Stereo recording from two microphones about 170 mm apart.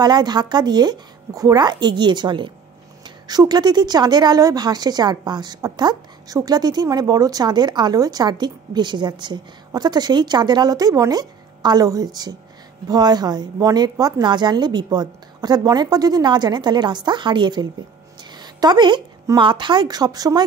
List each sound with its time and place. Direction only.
0.0 s speech: 25° right (ahead or behind)